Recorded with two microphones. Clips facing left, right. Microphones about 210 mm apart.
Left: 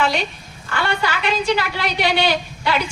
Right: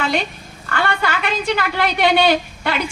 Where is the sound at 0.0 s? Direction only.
55° right (ahead or behind).